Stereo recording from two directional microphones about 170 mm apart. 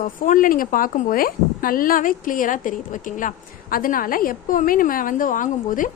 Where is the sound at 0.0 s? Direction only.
50° left (ahead or behind).